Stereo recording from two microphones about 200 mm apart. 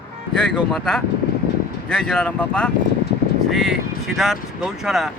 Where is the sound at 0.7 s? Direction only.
5° left (ahead or behind).